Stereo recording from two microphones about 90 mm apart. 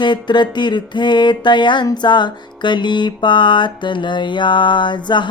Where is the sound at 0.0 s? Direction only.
60° left (ahead or behind).